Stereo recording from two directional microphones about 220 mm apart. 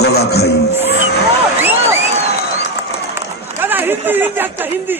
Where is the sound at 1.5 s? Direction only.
10° right (ahead or behind).